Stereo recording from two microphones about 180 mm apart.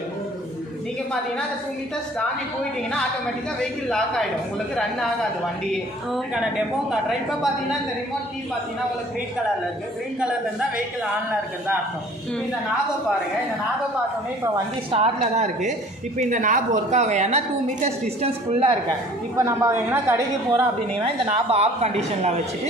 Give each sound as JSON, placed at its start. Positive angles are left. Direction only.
{"t": 3.9, "sound": "a woman's voice", "side_deg": 5}
{"t": 6.1, "sound": "a woman's voice", "side_deg": -5}
{"t": 14.9, "sound": "a woman's voice", "side_deg": -35}
{"t": 19.3, "sound": "a woman's voice", "side_deg": -15}
{"t": 21.0, "sound": "a woman's voice", "side_deg": -35}